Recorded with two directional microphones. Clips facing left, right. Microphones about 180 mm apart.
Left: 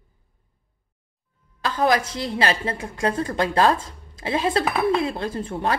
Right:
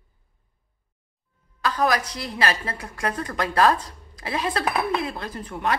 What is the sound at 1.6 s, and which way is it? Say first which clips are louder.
A woman's voice: left 2 dB; 25° left (ahead or behind).